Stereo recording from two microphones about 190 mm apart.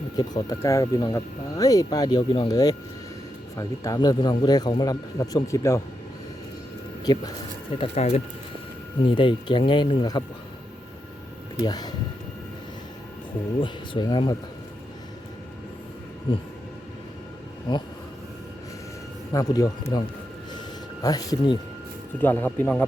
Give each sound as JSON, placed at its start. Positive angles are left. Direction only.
{"t": 0.2, "sound": "speech", "side_deg": 20}
{"t": 7.0, "sound": "speech", "side_deg": 20}
{"t": 7.8, "sound": "speech", "side_deg": 35}
{"t": 11.6, "sound": "speech", "side_deg": 20}
{"t": 13.6, "sound": "speech", "side_deg": 25}
{"t": 17.7, "sound": "speech", "side_deg": 20}
{"t": 19.3, "sound": "speech", "side_deg": 20}
{"t": 21.0, "sound": "speech", "side_deg": 20}
{"t": 22.2, "sound": "speech", "side_deg": 10}